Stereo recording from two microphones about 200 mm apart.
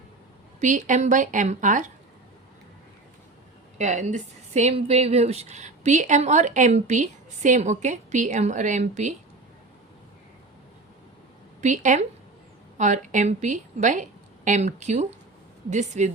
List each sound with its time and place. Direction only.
0.6 s a woman's voice: 40° right (ahead or behind)
3.8 s a woman's voice: 35° right (ahead or behind)
11.6 s a woman's voice: 40° right (ahead or behind)